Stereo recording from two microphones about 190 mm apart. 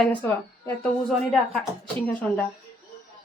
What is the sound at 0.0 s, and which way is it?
Speech, 10° left (ahead or behind).